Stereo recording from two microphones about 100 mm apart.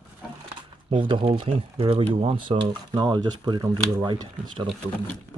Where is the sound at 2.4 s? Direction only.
50° right (ahead or behind).